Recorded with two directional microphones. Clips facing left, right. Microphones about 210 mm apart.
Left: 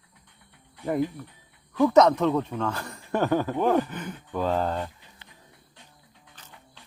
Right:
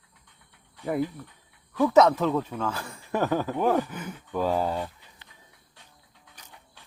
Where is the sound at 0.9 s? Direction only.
15° left (ahead or behind).